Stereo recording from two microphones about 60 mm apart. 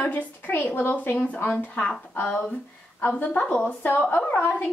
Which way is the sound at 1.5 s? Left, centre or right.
Centre.